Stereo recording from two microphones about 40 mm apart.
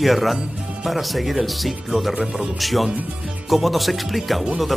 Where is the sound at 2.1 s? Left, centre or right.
Right.